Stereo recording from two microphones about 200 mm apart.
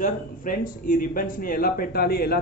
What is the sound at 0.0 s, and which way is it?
A man's voice, 45° left (ahead or behind).